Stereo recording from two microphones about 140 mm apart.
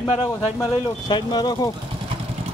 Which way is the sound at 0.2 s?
30° left (ahead or behind).